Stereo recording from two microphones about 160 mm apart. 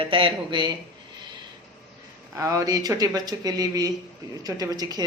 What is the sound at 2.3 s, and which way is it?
Speech, 20° right (ahead or behind).